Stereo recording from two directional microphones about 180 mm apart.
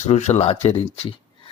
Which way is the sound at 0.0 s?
40° left (ahead or behind).